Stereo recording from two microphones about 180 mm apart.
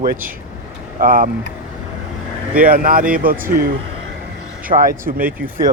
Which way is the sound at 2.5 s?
50° right (ahead or behind).